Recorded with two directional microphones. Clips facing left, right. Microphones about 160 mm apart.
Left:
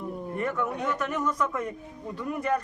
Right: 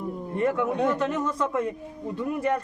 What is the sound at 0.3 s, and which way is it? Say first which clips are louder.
Speech: right 6 dB; 25° right (ahead or behind).